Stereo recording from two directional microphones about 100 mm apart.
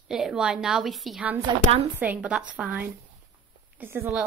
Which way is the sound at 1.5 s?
50° right (ahead or behind).